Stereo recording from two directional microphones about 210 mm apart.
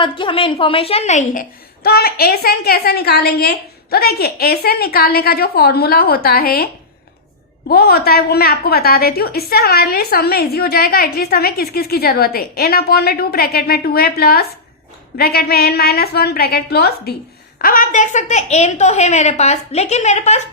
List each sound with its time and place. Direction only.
0.0 s a woman's voice: 25° left (ahead or behind); by 6.7 s 45° left (ahead or behind)
7.7 s a woman's voice: 45° left (ahead or behind)